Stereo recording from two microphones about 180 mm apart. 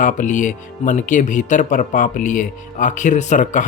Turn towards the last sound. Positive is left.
turn(degrees=45)  # may be behind; listen again after turning